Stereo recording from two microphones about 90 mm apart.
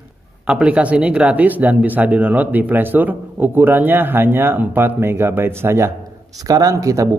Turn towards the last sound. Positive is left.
turn(degrees=-35)  # may be behind; listen again after turning